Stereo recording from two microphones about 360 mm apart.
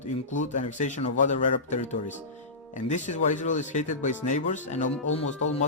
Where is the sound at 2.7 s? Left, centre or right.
Centre.